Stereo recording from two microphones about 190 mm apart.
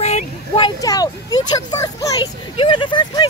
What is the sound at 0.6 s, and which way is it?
Speech, 20° left (ahead or behind).